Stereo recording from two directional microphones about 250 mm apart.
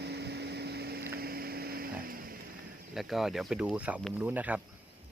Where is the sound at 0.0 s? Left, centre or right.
Right.